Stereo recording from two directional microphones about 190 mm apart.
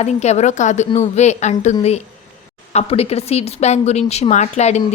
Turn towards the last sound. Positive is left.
turn(degrees=35)  # may be behind; listen again after turning